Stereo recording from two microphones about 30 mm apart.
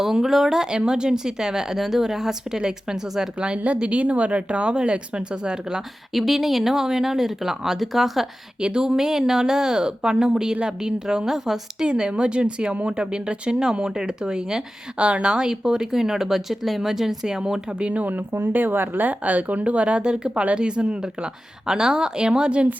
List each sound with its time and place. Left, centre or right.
0.0 s speech: centre
3.8 s speech: right
6.1 s speech: centre
8.8 s speech: centre
11.9 s speech: right
14.9 s speech: right
15.3 s speech: right
15.9 s speech: centre
17.7 s speech: right
18.0 s speech: right
19.2 s speech: right
20.0 s speech: right